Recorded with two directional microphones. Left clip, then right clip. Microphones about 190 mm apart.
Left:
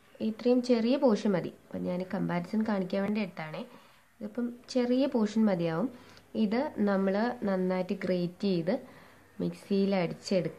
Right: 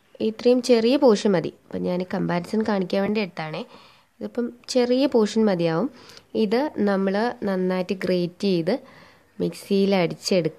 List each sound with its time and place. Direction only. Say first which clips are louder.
0.2 s speech: right 8 dB; 50° right (ahead or behind)